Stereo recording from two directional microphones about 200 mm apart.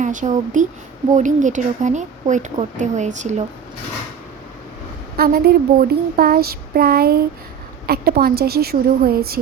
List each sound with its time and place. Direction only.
0.0 s a woman's voice: 40° right (ahead or behind)
5.1 s child singing: 50° right (ahead or behind)